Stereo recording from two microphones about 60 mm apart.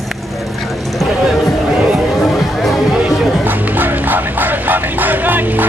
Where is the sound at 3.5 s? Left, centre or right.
Right.